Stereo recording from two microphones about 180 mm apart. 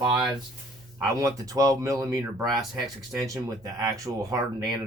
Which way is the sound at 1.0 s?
20° right (ahead or behind).